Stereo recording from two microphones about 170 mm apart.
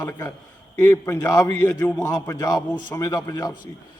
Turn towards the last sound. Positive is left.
turn(degrees=20)  # may be behind; listen again after turning